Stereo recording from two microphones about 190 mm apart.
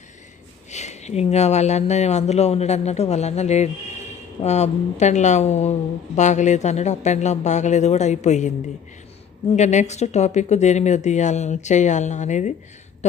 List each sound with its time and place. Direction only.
0.7 s speech: 35° left (ahead or behind)